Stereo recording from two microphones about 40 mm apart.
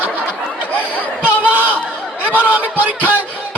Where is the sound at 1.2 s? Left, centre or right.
Right.